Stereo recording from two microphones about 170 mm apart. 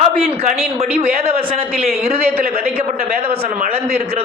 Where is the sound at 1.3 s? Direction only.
60° right (ahead or behind).